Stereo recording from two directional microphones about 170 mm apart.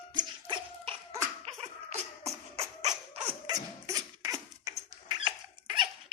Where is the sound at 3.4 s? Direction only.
20° right (ahead or behind).